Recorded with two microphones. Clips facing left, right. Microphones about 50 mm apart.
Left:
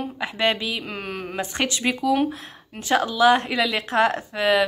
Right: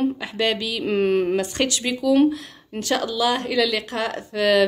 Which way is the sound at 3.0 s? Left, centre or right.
Left.